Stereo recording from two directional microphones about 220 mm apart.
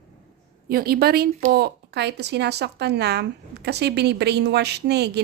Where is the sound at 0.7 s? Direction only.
45° right (ahead or behind).